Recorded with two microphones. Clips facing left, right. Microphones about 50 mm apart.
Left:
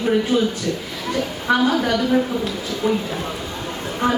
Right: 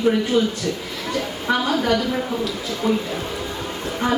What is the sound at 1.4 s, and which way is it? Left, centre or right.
Speech, centre.